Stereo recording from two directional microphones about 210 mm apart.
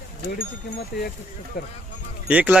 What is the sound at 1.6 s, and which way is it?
Speech, 45° left (ahead or behind).